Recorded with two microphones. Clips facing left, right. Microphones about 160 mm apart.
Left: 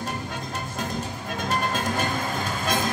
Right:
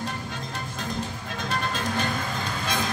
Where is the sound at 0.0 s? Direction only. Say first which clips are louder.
Left 1 dB; 45° left (ahead or behind).